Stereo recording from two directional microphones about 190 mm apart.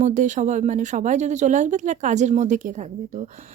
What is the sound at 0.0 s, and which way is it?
A woman's voice, 40° right (ahead or behind).